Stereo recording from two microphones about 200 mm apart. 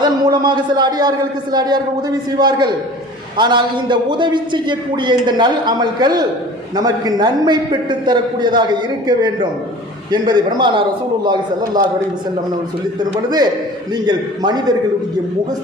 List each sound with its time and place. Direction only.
0.0 s a man's voice: 20° right (ahead or behind)
13.0 s a man's voice: 20° right (ahead or behind)